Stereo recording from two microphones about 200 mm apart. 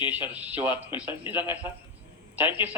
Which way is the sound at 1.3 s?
20° left (ahead or behind).